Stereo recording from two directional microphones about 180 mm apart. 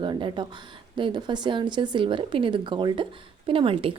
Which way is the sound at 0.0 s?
25° right (ahead or behind).